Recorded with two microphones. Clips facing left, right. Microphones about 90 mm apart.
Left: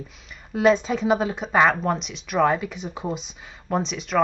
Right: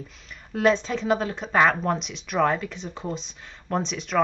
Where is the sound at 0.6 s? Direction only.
5° left (ahead or behind).